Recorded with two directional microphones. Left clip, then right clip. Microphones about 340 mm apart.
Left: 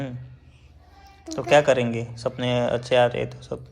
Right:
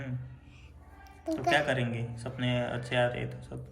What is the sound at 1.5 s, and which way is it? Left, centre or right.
A man's voice, centre.